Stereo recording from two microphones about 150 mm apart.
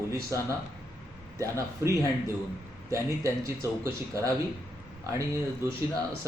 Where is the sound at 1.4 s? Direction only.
20° right (ahead or behind).